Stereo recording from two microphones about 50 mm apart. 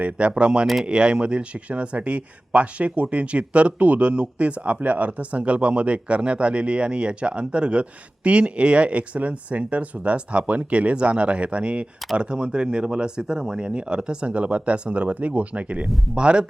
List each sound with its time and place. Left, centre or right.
0.0 s a man's voice: right